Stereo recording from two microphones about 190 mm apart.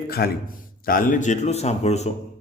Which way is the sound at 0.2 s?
55° left (ahead or behind).